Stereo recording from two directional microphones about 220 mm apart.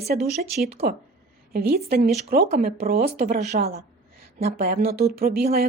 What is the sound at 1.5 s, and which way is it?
A woman's voice, 45° right (ahead or behind).